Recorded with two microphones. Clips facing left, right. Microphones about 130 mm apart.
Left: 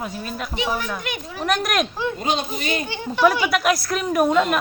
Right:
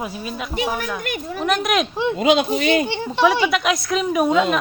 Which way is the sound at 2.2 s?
90° right.